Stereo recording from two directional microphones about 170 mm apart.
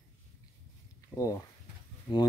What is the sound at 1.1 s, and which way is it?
Speech, 20° left (ahead or behind).